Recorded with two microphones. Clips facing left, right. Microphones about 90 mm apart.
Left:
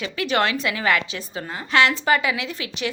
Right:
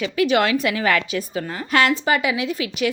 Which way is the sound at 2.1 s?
40° left (ahead or behind).